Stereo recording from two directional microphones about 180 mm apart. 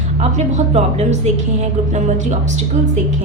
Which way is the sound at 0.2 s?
40° right (ahead or behind).